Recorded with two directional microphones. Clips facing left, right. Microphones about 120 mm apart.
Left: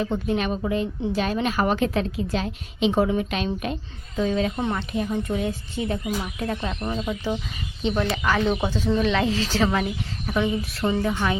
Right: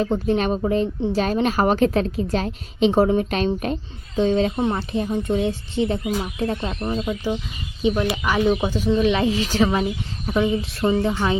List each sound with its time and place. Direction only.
0.0 s speech: 35° right (ahead or behind)
4.2 s speech: 30° right (ahead or behind)
6.8 s a woman's voice: 10° right (ahead or behind)